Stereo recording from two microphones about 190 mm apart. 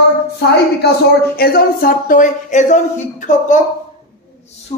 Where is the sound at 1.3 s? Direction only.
55° left (ahead or behind).